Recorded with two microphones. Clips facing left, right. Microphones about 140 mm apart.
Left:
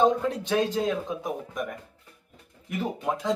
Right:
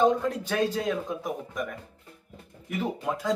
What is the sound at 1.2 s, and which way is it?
Speech, 5° left (ahead or behind).